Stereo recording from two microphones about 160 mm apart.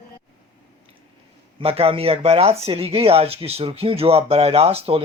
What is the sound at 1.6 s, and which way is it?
Speech, 35° right (ahead or behind).